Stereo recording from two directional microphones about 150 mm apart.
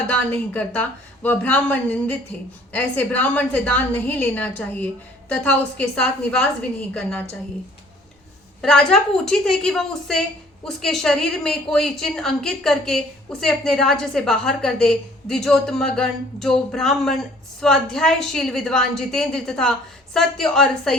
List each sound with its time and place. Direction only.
0.1 s a woman's voice: 10° left (ahead or behind)
8.6 s a woman's voice: 5° left (ahead or behind)